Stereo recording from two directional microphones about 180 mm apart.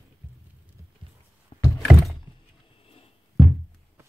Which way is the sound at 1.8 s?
Centre (ahead or behind).